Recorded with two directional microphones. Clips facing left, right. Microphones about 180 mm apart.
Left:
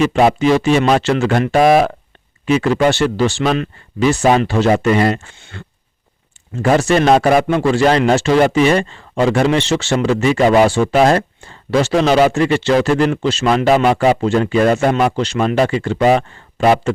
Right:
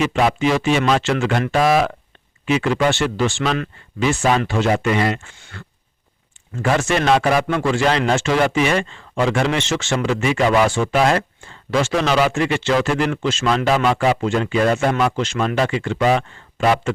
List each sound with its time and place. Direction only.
0.0 s a man's voice: 35° left (ahead or behind)
5.4 s speech: 25° left (ahead or behind)
6.6 s a man's voice: 35° left (ahead or behind)
7.3 s a man's voice: 25° left (ahead or behind)